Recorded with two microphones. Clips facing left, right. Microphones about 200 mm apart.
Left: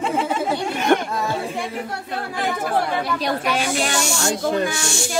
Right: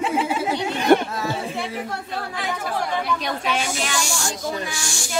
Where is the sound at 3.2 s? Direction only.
40° left (ahead or behind).